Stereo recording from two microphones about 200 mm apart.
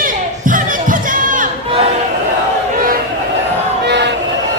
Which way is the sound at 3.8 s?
60° right (ahead or behind).